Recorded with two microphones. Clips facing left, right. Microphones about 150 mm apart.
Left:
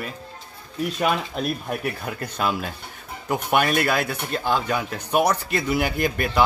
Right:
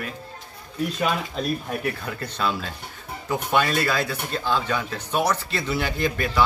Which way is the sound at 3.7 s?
55° left (ahead or behind).